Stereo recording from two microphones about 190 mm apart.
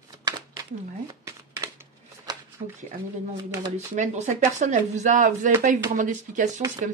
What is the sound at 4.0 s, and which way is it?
Speech, 40° right (ahead or behind).